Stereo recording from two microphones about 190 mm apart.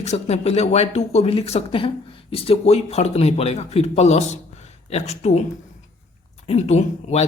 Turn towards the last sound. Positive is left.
turn(degrees=35)  # may be behind; listen again after turning